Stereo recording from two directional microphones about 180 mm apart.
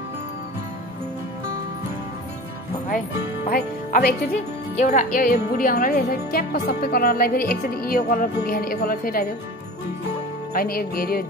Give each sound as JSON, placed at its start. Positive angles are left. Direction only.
{"t": 3.4, "sound": "speech", "side_deg": 55}
{"t": 4.7, "sound": "speech", "side_deg": 40}
{"t": 10.5, "sound": "speech", "side_deg": 55}